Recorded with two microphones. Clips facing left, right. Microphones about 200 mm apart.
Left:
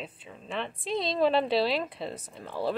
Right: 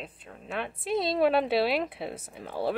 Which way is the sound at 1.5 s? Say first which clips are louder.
Right 1 dB; 55° right (ahead or behind).